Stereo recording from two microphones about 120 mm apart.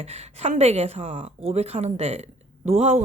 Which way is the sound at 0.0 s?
65° right (ahead or behind).